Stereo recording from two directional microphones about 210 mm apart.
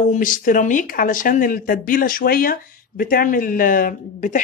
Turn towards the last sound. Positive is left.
turn(degrees=40)  # may be behind; listen again after turning